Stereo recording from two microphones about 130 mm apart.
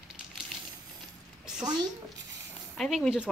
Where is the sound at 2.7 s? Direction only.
Centre (ahead or behind).